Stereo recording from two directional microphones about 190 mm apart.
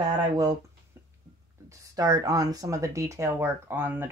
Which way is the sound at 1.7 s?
20° right (ahead or behind).